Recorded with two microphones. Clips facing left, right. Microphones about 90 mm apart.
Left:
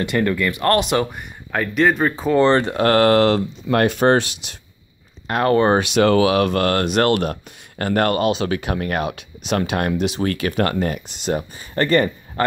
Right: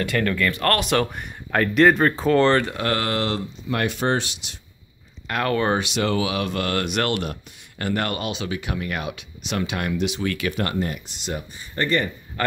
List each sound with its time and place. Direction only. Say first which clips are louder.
0.0 s speech: left 3 dB; 20° left (ahead or behind)
1.1 s speech: right 1 dB; 5° left (ahead or behind)
2.7 s speech: left 10 dB; 50° left (ahead or behind)
5.2 s speech: left 6 dB; 30° left (ahead or behind)
5.8 s speech: left 8 dB; 55° left (ahead or behind)
6.8 s speech: left 6 dB; 40° left (ahead or behind)
10.6 s speech: left 8 dB; 70° left (ahead or behind)
11.2 s speech: left 8 dB; 45° left (ahead or behind)
11.7 s speech: left 6 dB; 55° left (ahead or behind)